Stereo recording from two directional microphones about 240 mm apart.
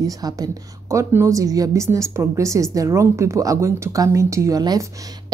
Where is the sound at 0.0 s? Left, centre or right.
Centre.